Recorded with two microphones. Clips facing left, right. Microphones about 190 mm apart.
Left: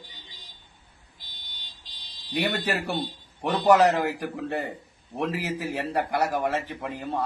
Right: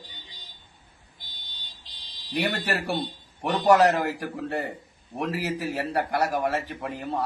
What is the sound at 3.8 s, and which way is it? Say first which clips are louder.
Speech: even; 15° left (ahead or behind).